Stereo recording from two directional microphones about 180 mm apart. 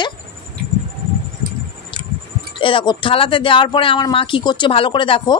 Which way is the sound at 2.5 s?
30° left (ahead or behind).